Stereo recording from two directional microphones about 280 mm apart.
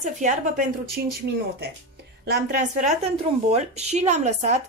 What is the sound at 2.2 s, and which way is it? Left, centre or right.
A woman's voice, right.